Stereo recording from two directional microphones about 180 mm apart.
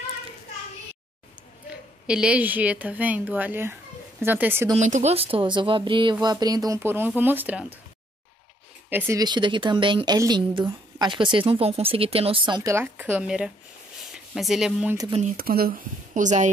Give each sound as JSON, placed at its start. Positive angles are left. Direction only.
{"t": 2.0, "sound": "speech", "side_deg": -5}
{"t": 4.7, "sound": "a woman's voice", "side_deg": -40}
{"t": 8.9, "sound": "speech", "side_deg": -10}
{"t": 9.2, "sound": "a woman's voice", "side_deg": -25}
{"t": 15.3, "sound": "speech", "side_deg": -55}